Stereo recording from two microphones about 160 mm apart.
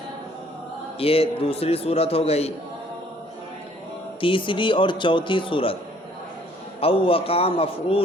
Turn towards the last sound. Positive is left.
turn(degrees=35)  # may be behind; listen again after turning